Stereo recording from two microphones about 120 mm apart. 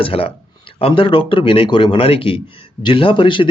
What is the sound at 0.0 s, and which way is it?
Speech, 50° left (ahead or behind).